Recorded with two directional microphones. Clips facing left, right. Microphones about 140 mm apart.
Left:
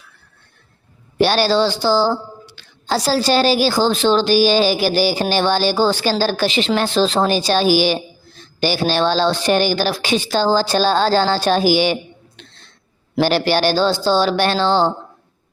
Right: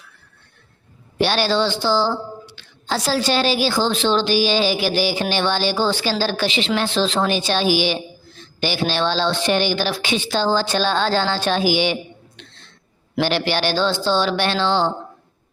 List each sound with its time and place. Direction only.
1.2 s a woman's voice: 40° left (ahead or behind)
12.4 s a sound: 40° left (ahead or behind)
13.1 s a woman's voice: 40° left (ahead or behind)